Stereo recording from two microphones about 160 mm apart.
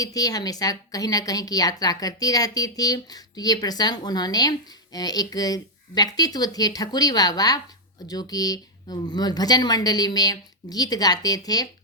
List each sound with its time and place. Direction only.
0.0 s a woman's voice: 20° left (ahead or behind)